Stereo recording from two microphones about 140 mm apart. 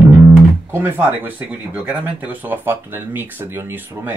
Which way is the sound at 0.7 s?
15° right (ahead or behind).